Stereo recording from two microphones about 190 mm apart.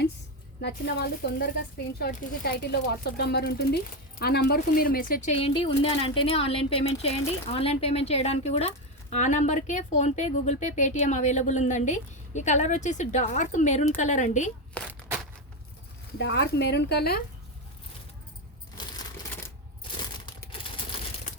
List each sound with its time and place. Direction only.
0.6 s speech: 55° left (ahead or behind)
5.4 s speech: 30° left (ahead or behind)
14.8 s a sound: 5° left (ahead or behind)
16.1 s speech: 65° left (ahead or behind)
20.0 s crumpling: 25° left (ahead or behind)